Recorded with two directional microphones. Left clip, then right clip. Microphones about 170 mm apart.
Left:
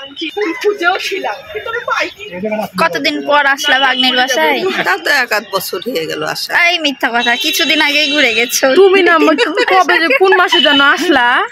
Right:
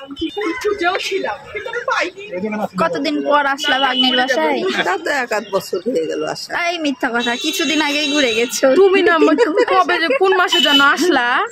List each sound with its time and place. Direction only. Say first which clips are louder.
0.4 s a woman's voice: left 5 dB; 45° left (ahead or behind)
2.8 s a woman's voice: left 4 dB; centre (ahead or behind)
4.8 s speech: left 6 dB; 15° right (ahead or behind)
6.5 s a woman's voice: left 9 dB; 5° left (ahead or behind)
8.7 s a woman's voice: left 5 dB; 50° left (ahead or behind)